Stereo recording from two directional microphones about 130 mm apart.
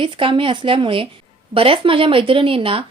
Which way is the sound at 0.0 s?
40° right (ahead or behind).